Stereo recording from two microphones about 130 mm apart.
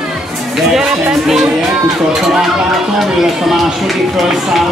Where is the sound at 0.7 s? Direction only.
5° right (ahead or behind).